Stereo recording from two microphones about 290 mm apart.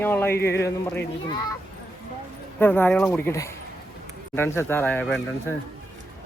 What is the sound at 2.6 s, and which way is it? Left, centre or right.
Speech, centre.